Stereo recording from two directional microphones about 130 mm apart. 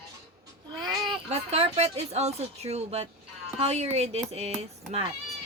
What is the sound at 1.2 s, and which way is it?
Speech, 50° right (ahead or behind).